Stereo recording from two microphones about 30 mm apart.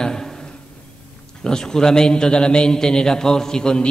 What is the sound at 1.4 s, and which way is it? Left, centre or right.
A man's voice, left.